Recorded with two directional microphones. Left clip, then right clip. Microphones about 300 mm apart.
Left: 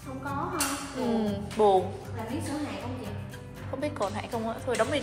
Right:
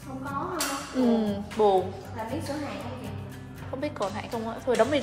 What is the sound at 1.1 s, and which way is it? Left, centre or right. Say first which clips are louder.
Speech: right 1 dB; centre.